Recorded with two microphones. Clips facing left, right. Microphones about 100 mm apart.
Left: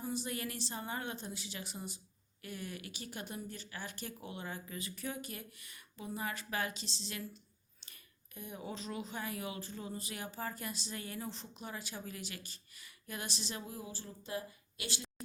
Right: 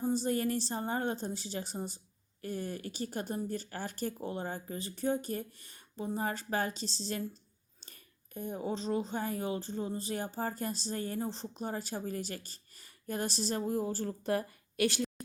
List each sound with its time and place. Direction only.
0.0 s speech: 35° right (ahead or behind); by 15.1 s 60° right (ahead or behind)